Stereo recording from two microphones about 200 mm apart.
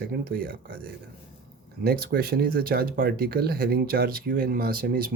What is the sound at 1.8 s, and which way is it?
Speech, 50° right (ahead or behind).